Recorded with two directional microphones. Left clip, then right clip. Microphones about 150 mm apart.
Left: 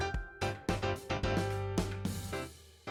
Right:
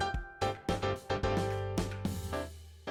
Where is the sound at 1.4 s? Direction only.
Centre (ahead or behind).